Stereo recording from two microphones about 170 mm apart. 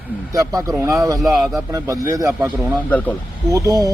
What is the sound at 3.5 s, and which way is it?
Speech, 20° right (ahead or behind).